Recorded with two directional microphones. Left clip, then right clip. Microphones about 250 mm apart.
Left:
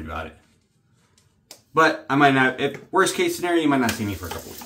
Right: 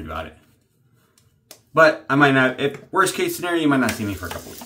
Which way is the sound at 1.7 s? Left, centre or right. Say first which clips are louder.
Right 3 dB; centre.